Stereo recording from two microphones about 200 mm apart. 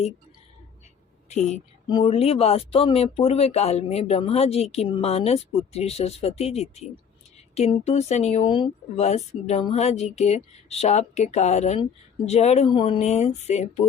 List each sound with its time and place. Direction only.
1.3 s speech: 35° left (ahead or behind)